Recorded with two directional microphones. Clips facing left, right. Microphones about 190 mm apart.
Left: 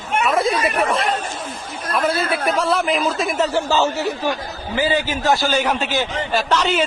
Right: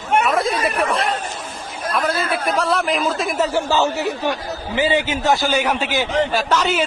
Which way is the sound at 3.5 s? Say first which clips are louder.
Even; 15° right (ahead or behind).